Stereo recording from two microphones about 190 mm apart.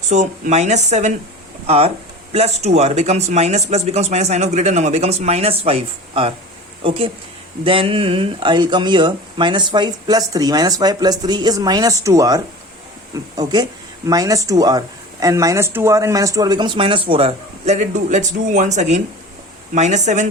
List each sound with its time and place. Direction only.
0.1 s speech: 40° right (ahead or behind)